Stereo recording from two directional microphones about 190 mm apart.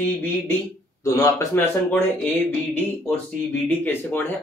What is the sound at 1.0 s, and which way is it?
Speech, 15° left (ahead or behind).